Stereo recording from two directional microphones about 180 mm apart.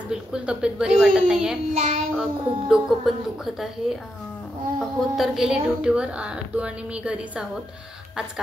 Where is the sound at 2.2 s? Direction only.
5° right (ahead or behind).